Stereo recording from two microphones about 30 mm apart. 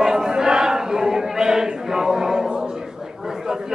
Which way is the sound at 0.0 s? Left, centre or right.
Centre.